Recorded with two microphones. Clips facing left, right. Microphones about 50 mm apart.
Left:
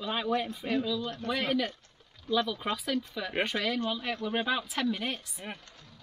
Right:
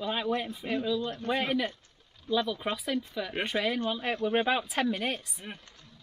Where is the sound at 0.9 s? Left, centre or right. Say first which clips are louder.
Right 2 dB; right.